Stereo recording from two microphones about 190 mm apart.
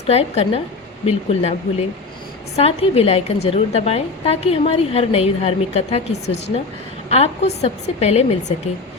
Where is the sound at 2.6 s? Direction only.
30° left (ahead or behind).